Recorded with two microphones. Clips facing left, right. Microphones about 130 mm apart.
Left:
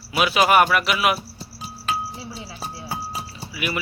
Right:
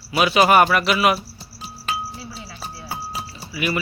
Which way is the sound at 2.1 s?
20° left (ahead or behind).